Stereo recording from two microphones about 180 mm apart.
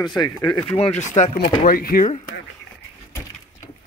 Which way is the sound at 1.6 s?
55° left (ahead or behind).